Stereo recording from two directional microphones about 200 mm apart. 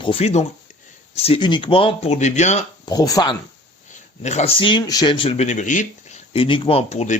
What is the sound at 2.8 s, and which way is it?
Speech, 20° left (ahead or behind).